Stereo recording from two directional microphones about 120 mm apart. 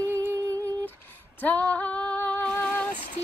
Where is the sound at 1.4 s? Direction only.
15° left (ahead or behind).